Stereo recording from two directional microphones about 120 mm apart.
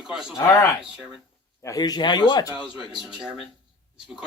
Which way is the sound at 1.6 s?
30° left (ahead or behind).